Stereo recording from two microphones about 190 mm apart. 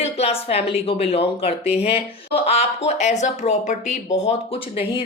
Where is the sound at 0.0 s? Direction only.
35° left (ahead or behind).